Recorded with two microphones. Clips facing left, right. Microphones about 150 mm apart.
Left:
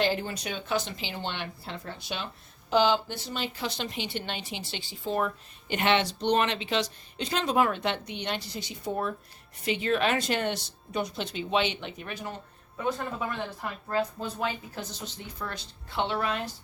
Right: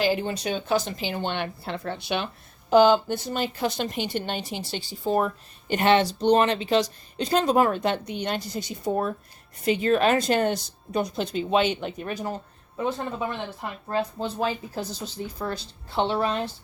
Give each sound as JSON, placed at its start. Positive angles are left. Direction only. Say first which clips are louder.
{"t": 0.0, "sound": "speech", "louder": "right 3 dB", "side_deg": -10}
{"t": 0.3, "sound": "a woman's voice", "louder": "right 6 dB", "side_deg": -30}
{"t": 2.6, "sound": "a woman's voice", "louder": "right 7 dB", "side_deg": -50}